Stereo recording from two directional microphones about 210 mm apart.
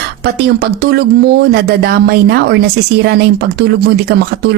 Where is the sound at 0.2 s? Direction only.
50° right (ahead or behind).